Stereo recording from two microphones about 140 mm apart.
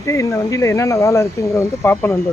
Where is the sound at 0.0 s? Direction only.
20° left (ahead or behind).